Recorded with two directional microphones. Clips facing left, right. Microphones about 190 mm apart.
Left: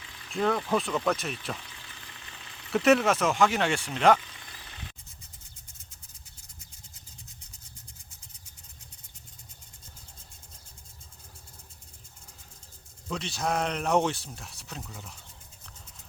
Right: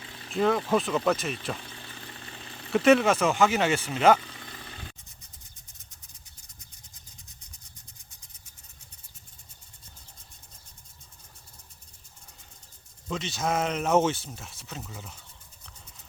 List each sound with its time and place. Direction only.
0.0 s a sound: 35° right (ahead or behind)
0.3 s speech: centre (ahead or behind)
1.6 s a sound: 35° right (ahead or behind)
2.7 s speech: centre (ahead or behind)
4.2 s vehicle: 35° right (ahead or behind)
13.1 s speech: centre (ahead or behind)